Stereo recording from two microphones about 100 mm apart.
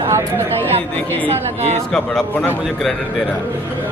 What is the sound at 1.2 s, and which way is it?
Speech, 90° right.